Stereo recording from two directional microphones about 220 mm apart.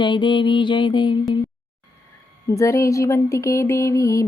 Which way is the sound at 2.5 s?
15° left (ahead or behind).